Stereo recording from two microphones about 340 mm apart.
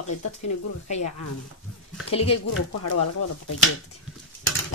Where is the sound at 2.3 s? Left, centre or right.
Left.